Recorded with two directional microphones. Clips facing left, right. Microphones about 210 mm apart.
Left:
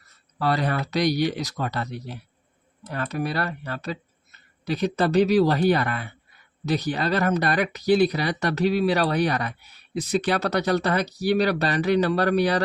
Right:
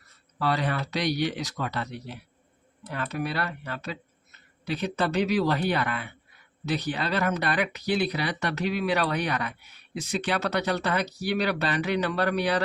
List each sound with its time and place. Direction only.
0.3 s speech: 40° left (ahead or behind)